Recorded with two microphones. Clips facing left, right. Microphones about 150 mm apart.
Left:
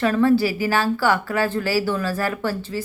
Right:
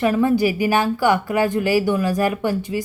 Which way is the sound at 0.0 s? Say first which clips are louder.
Even; 15° right (ahead or behind).